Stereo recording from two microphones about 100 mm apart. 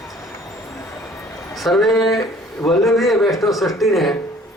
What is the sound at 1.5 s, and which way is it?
Speech, centre (ahead or behind).